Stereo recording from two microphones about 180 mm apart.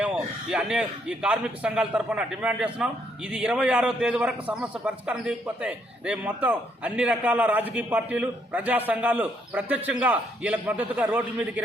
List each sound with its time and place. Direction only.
0.5 s a man's voice: 5° right (ahead or behind)